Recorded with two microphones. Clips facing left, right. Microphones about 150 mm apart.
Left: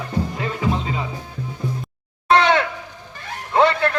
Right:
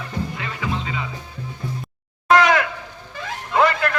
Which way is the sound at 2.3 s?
30° left (ahead or behind).